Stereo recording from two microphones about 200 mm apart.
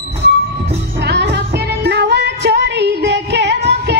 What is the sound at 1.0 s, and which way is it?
Female singing, 60° right (ahead or behind).